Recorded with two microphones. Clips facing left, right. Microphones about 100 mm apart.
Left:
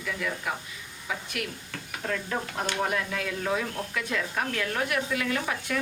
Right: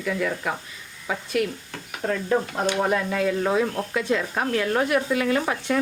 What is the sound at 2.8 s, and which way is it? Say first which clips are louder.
Speech: right 7 dB; 35° right (ahead or behind).